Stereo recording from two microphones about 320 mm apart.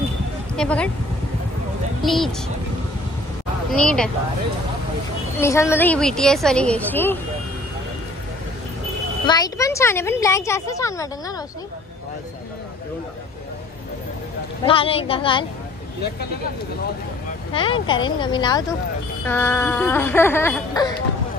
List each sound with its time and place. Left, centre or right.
0.6 s a woman's voice: centre
2.0 s a woman's voice: centre
3.7 s a woman's voice: centre
5.4 s a woman's voice: centre
9.2 s a woman's voice: centre
14.7 s a woman's voice: centre
17.5 s a woman's voice: centre